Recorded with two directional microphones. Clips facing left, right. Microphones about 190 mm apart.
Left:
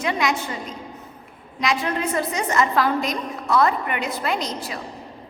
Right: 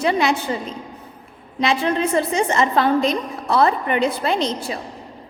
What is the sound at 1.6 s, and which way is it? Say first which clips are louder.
A woman's voice: right 4 dB; 30° right (ahead or behind).